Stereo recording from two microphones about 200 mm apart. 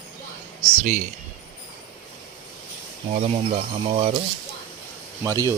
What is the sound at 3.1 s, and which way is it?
Speech, 30° right (ahead or behind).